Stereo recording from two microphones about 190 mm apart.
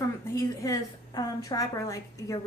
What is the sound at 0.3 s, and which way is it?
A woman's voice, 15° left (ahead or behind).